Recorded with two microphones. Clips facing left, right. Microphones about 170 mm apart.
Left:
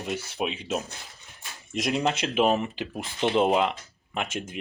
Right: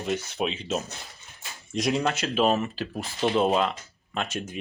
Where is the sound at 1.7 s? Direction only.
Centre (ahead or behind).